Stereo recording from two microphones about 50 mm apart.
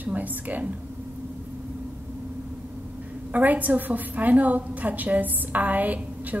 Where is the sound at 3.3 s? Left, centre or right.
Right.